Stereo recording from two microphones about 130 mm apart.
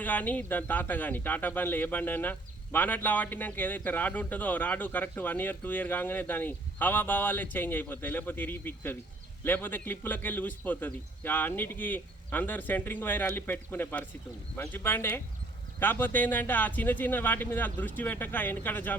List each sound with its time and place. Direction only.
0.0 s speech: 15° left (ahead or behind)